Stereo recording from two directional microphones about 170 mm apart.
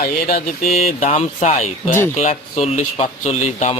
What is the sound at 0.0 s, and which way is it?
Speech, 60° left (ahead or behind).